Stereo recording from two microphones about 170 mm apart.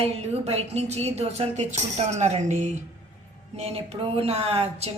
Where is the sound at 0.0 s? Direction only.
40° right (ahead or behind).